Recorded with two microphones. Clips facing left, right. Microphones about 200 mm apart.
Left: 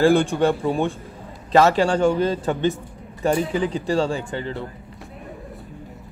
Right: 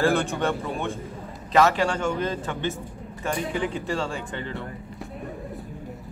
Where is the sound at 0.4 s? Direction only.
35° left (ahead or behind).